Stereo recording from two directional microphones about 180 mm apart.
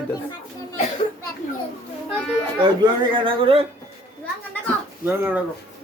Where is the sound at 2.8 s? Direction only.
30° right (ahead or behind).